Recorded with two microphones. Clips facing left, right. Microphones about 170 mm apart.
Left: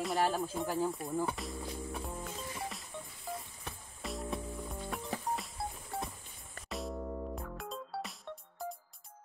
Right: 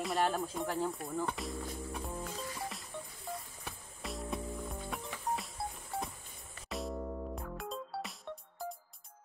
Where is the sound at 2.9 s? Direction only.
Centre (ahead or behind).